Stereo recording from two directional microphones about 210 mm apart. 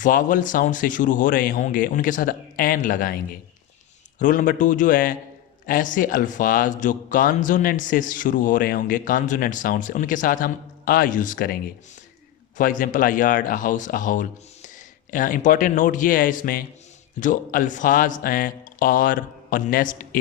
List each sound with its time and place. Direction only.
0.0 s a man's voice: 40° left (ahead or behind)
4.2 s a man's voice: 40° left (ahead or behind)